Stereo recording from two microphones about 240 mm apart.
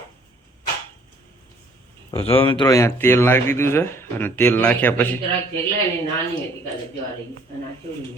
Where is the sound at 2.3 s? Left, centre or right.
Left; by 5.1 s centre.